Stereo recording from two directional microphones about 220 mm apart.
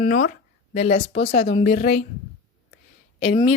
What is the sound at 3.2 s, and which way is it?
Speech, 30° left (ahead or behind).